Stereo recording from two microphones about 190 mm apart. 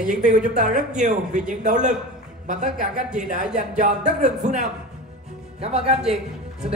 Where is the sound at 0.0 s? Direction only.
40° right (ahead or behind).